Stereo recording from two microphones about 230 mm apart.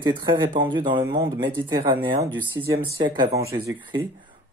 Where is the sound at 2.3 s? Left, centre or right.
Centre.